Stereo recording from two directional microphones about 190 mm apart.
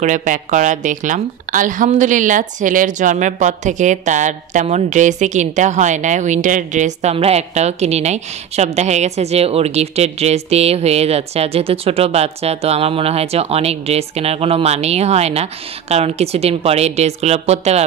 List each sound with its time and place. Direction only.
0.0 s speech: 40° right (ahead or behind)